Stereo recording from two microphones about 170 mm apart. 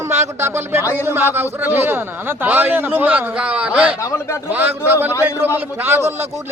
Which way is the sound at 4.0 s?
15° left (ahead or behind).